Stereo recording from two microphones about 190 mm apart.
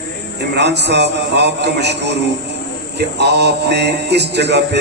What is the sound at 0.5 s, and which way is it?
Music, 60° right (ahead or behind).